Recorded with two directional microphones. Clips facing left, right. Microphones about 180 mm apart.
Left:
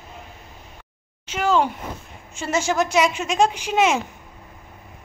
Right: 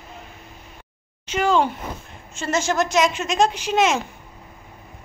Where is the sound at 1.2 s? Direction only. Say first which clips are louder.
Right 1 dB; 5° left (ahead or behind).